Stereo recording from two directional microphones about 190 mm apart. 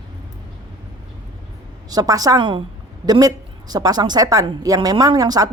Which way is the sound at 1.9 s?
20° right (ahead or behind).